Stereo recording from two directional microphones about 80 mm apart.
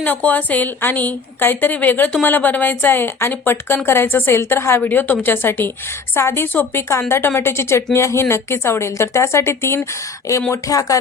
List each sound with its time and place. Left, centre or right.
0.0 s a woman's voice: centre
10.5 s speech: left